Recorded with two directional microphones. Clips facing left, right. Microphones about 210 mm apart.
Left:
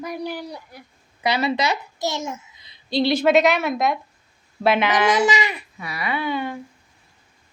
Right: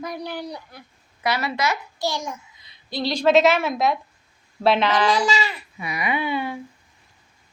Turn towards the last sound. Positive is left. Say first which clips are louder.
# even
turn(degrees=-5)  # may be behind; listen again after turning